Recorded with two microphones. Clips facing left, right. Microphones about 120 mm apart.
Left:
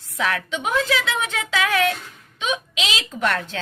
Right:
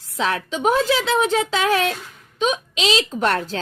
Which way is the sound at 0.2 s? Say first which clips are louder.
Right 3 dB; 25° right (ahead or behind).